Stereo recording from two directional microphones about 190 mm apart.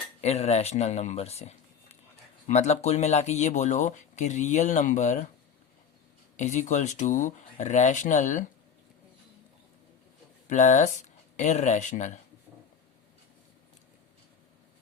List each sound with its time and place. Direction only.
0.2 s speech: 35° left (ahead or behind)
6.3 s speech: 40° left (ahead or behind)
10.5 s speech: 40° left (ahead or behind)